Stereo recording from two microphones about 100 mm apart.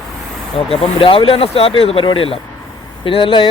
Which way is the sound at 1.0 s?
65° left (ahead or behind).